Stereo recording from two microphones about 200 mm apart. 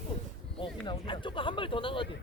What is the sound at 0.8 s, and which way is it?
Speech, 25° left (ahead or behind).